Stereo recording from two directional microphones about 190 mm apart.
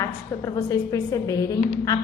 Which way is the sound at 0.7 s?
15° left (ahead or behind).